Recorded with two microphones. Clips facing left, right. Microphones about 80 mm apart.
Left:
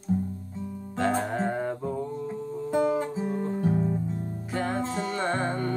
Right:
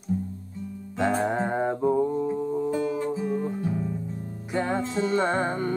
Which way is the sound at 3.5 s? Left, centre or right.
Left.